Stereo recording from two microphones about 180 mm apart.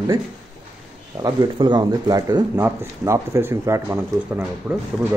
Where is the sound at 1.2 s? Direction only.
25° right (ahead or behind).